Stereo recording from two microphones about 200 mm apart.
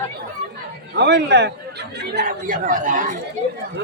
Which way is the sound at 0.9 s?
60° right (ahead or behind).